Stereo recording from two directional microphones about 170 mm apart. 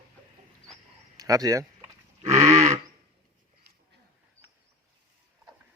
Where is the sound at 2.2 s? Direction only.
40° right (ahead or behind).